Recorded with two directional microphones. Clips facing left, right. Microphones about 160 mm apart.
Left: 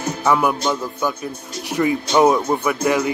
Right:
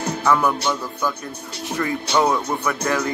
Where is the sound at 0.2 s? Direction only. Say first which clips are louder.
Left 2 dB; 15° left (ahead or behind).